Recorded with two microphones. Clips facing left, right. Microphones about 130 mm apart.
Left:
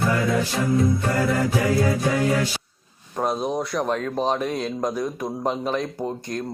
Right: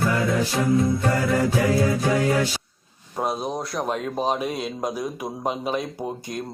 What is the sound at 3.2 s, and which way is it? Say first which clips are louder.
Speech: left 2 dB; 5° right (ahead or behind).